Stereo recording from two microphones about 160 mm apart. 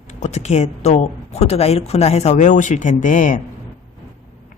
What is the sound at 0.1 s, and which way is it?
Speech, 45° left (ahead or behind).